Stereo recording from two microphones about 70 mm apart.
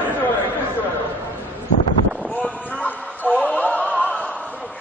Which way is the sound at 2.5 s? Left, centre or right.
Centre.